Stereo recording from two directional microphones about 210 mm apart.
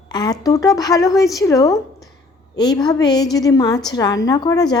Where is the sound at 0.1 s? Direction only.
20° left (ahead or behind).